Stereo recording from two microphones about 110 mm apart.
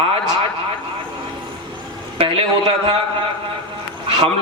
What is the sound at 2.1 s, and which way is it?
Speech, 55° right (ahead or behind).